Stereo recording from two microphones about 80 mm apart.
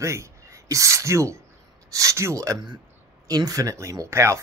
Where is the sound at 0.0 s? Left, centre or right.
Right.